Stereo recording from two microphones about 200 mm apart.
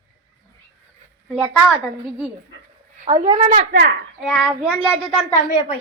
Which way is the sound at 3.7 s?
55° right (ahead or behind).